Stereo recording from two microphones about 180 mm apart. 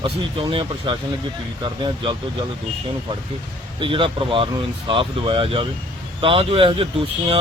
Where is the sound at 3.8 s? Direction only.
30° right (ahead or behind).